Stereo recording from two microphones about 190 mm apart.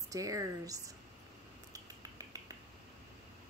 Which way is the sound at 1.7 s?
20° right (ahead or behind).